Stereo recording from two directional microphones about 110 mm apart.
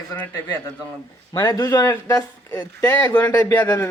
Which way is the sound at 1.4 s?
30° left (ahead or behind).